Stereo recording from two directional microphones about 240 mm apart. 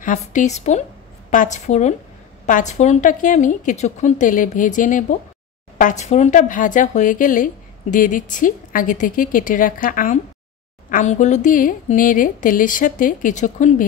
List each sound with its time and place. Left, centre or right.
0.0 s a woman's voice: left